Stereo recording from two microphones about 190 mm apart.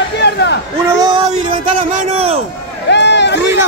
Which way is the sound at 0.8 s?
20° right (ahead or behind).